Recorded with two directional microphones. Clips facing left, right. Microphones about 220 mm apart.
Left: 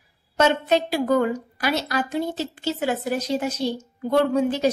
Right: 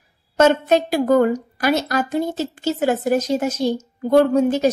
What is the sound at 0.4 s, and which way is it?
A woman's voice, 45° right (ahead or behind).